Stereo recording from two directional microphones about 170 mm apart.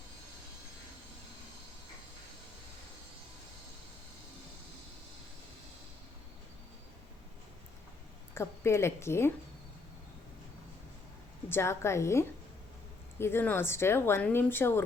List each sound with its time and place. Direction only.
8.4 s speech: 15° left (ahead or behind)
11.4 s speech: 15° left (ahead or behind)